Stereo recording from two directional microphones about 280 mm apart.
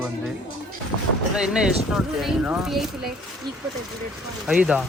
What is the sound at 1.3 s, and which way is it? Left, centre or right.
Speech, centre.